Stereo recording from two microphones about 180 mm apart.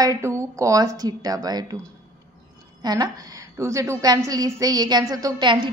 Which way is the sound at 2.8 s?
20° right (ahead or behind).